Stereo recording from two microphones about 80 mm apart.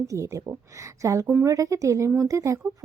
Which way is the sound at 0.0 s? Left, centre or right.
Right.